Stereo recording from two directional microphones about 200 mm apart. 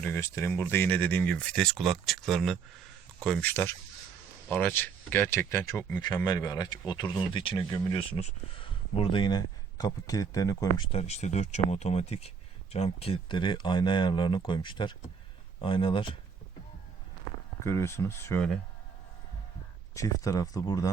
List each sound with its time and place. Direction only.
0.0 s speech: 10° left (ahead or behind)
10.9 s speech: 35° left (ahead or behind)
17.6 s speech: 15° left (ahead or behind)
19.9 s speech: 15° left (ahead or behind)